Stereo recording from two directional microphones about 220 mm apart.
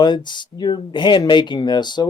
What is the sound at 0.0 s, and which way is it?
Speech, 20° left (ahead or behind).